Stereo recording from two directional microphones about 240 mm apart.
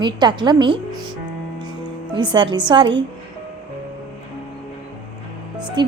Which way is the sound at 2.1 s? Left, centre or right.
Centre.